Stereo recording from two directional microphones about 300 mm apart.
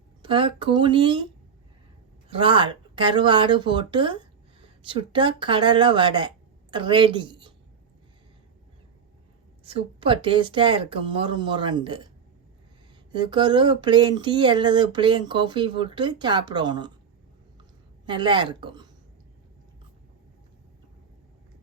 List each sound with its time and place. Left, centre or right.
0.2 s speech: centre
2.3 s speech: centre
9.6 s speech: centre
13.1 s speech: centre
17.6 s a sound: centre